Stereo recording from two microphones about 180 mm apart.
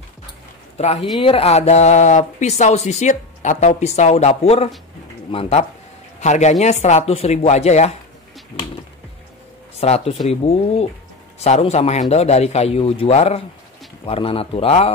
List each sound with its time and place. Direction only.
0.8 s speech: 40° left (ahead or behind)
9.8 s speech: 35° left (ahead or behind)